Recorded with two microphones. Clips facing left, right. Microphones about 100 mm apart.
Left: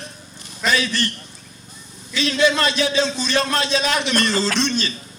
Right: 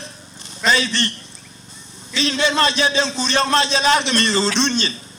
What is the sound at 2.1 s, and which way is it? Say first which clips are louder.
A man's voice: left 1 dB; 30° right (ahead or behind).